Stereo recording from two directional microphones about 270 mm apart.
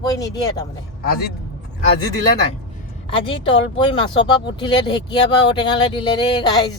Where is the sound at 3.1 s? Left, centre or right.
Centre.